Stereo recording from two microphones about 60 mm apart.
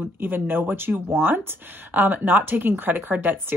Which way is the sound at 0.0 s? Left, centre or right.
Right.